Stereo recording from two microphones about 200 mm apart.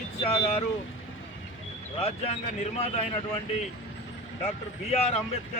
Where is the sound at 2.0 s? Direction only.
30° left (ahead or behind).